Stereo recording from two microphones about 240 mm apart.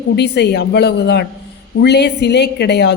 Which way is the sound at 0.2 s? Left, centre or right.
Left.